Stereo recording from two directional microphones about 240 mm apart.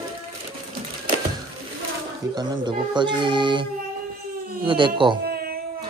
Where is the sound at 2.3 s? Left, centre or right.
Centre.